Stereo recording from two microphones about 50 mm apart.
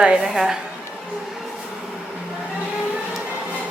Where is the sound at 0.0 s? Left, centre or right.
Centre.